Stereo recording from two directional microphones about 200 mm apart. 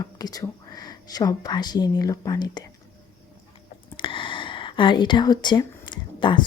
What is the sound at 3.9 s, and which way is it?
Whispering, 25° left (ahead or behind).